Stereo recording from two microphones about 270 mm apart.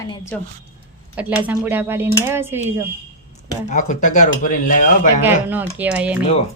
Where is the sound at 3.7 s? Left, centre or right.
Left.